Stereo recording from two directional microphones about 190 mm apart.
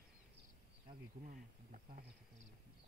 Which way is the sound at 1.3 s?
45° right (ahead or behind).